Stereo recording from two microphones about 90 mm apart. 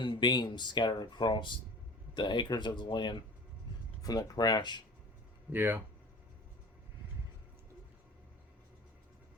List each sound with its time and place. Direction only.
0.0 s speech: 55° left (ahead or behind)
4.0 s speech: 45° left (ahead or behind)
5.5 s speech: 20° right (ahead or behind)